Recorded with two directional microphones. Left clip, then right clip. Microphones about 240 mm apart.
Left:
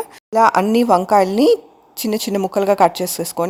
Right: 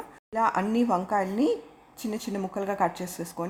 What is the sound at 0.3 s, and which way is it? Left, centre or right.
Speech, left.